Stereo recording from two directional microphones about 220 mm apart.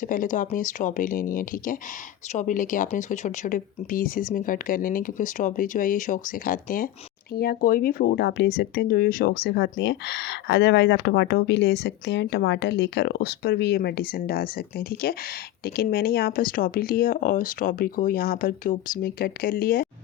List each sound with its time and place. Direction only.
0.1 s speech: 35° left (ahead or behind)